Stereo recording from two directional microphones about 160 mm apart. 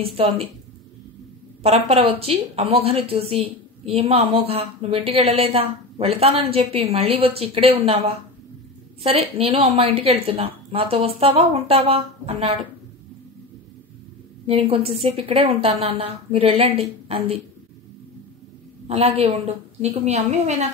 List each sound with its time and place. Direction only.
0.0 s speech: 35° right (ahead or behind)
1.9 s speech: 40° right (ahead or behind)
14.4 s speech: 35° right (ahead or behind)
18.9 s a woman's voice: 40° right (ahead or behind)